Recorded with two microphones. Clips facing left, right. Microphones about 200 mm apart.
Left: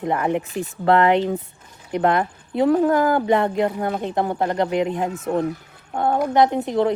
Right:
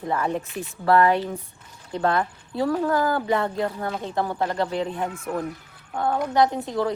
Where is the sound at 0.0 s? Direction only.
20° left (ahead or behind).